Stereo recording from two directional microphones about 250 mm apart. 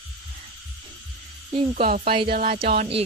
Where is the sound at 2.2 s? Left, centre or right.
Right.